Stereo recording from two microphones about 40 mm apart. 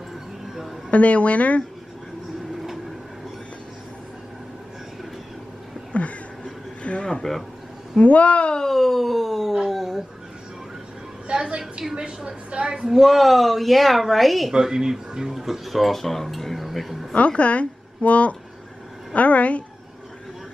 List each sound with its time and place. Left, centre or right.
0.8 s a woman's voice: left
5.9 s a sound: left
7.3 s speech: centre
8.0 s a woman's voice: left
8.5 s speech: centre
11.3 s a woman's voice: centre
13.0 s speech: centre
14.5 s speech: centre
15.3 s speech: centre
17.1 s a woman's voice: left